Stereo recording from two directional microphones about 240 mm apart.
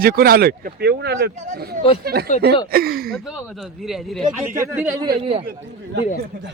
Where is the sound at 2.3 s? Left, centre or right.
Left.